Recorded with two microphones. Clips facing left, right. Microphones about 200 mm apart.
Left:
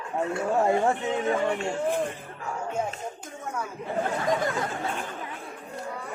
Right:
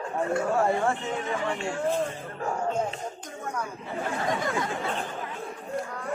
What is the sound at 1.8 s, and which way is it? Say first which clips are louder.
Speech: right 1 dB; 15° left (ahead or behind).